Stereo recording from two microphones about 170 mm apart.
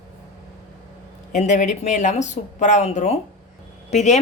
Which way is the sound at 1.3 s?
45° left (ahead or behind).